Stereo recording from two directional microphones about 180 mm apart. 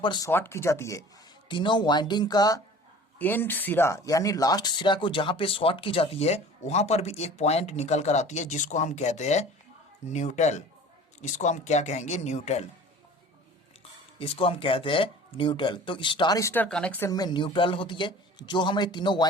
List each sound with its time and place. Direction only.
0.0 s speech: 25° left (ahead or behind)
0.3 s speech: 15° left (ahead or behind)
1.5 s speech: 25° left (ahead or behind)
3.2 s speech: 10° left (ahead or behind); by 12.6 s 40° left (ahead or behind)
14.2 s speech: 30° left (ahead or behind); by 17.1 s 10° left (ahead or behind)
17.1 s speech: 20° left (ahead or behind)